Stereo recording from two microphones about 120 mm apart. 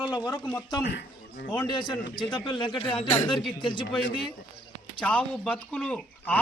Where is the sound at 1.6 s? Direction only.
40° left (ahead or behind).